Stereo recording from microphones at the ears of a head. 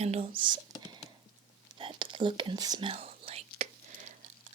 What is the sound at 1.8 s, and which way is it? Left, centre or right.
Whispering, right.